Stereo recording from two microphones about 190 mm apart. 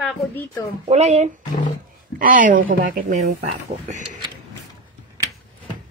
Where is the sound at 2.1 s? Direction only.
45° right (ahead or behind).